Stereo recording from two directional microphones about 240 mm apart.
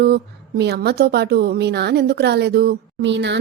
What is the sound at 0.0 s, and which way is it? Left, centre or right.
A woman's voice, right.